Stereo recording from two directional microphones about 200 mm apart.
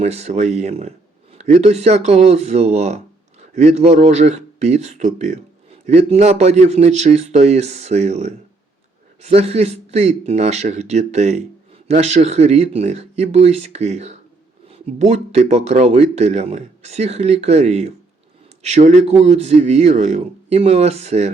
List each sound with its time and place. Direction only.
0.0 s speech: 30° right (ahead or behind)